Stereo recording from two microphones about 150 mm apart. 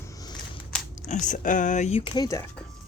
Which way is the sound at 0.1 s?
25° left (ahead or behind).